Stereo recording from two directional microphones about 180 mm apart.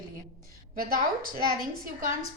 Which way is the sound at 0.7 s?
55° right (ahead or behind).